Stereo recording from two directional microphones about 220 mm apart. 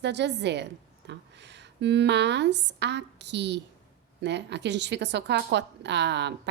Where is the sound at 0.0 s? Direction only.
50° right (ahead or behind).